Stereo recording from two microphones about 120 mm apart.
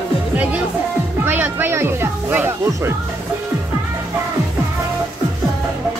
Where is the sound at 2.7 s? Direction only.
20° right (ahead or behind).